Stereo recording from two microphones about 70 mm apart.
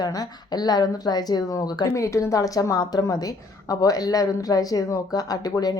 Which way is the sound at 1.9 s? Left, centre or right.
Left.